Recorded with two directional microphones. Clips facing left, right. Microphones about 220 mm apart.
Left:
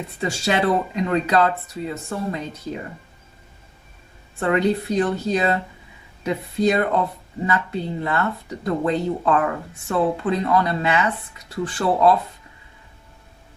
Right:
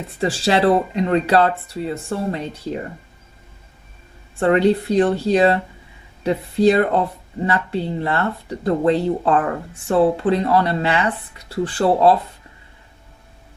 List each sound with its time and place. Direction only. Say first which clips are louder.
0.2 s speech: right 4 dB; 30° right (ahead or behind)
4.4 s speech: right 4 dB; 30° right (ahead or behind)